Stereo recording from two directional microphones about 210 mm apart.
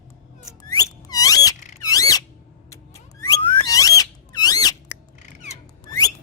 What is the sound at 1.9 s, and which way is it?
Squeal, 15° left (ahead or behind).